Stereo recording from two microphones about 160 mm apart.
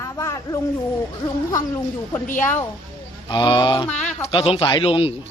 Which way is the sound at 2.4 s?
15° left (ahead or behind).